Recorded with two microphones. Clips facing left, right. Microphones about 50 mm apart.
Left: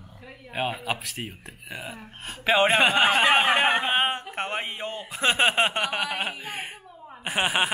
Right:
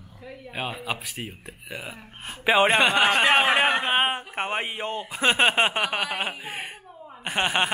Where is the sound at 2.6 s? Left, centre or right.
Right.